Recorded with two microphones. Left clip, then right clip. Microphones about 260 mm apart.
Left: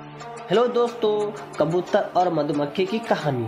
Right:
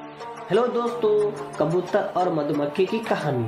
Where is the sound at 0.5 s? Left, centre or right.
Left.